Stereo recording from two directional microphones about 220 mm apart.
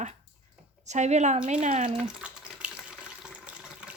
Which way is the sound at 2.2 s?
5° right (ahead or behind).